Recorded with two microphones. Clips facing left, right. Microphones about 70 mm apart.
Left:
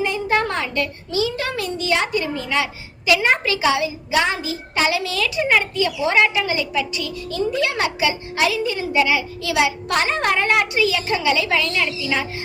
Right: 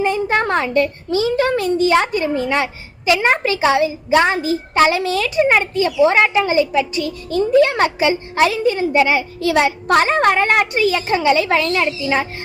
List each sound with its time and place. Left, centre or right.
0.0 s a woman's voice: right